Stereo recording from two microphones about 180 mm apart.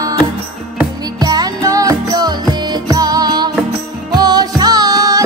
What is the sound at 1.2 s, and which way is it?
Music, 20° right (ahead or behind).